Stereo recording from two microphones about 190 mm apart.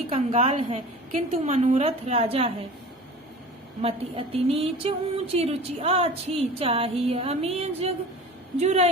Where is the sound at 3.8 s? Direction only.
30° right (ahead or behind).